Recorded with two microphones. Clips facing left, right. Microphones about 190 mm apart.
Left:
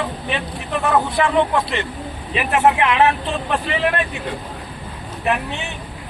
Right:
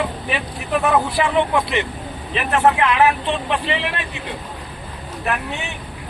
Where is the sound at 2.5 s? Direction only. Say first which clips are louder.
Even; 15° left (ahead or behind).